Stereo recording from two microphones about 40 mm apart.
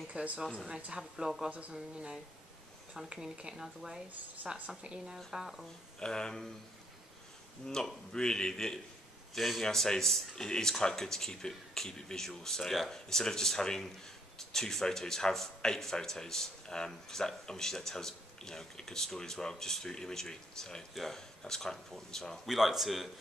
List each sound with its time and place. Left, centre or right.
0.1 s speech: right
0.9 s speech: centre
3.5 s speech: centre
4.6 s speech: right
5.3 s speech: centre
5.9 s speech: centre
7.6 s speech: centre
9.3 s a man's voice: centre
9.6 s speech: centre
20.9 s a man's voice: centre
21.5 s speech: centre
22.5 s a man's voice: centre